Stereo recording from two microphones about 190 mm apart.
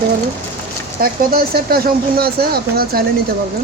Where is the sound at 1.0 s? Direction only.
50° right (ahead or behind).